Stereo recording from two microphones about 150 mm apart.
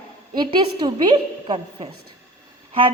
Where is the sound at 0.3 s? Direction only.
30° right (ahead or behind).